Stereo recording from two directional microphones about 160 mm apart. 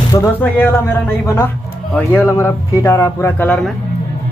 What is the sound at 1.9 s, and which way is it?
Speech, 10° left (ahead or behind).